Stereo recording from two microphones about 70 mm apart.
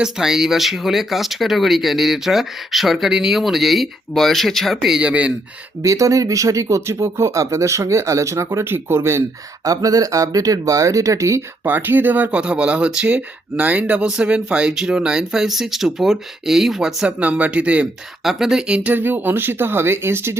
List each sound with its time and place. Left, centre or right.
0.0 s speech: centre
4.9 s speech: centre
5.8 s speech: right
9.6 s speech: right
11.6 s speech: right; by 17.1 s centre
17.1 s speech: centre
18.2 s speech: centre
18.9 s speech: right